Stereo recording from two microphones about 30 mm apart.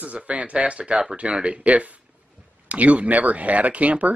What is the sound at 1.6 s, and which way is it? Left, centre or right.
Speech, right.